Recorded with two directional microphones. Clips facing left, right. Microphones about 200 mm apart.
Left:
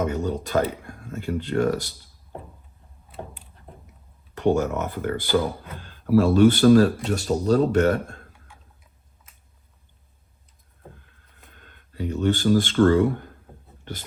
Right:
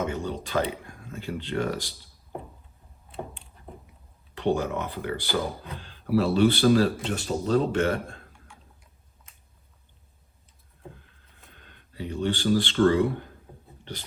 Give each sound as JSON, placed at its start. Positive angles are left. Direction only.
{"t": 0.0, "sound": "speech", "side_deg": 45}
{"t": 4.4, "sound": "speech", "side_deg": 45}
{"t": 11.6, "sound": "speech", "side_deg": 50}